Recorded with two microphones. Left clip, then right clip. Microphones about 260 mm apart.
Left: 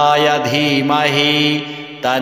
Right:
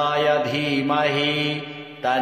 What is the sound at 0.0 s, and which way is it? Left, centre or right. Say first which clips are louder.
Mantra: left 7 dB; left.